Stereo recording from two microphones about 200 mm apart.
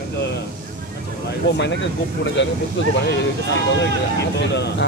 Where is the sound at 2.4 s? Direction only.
65° left (ahead or behind).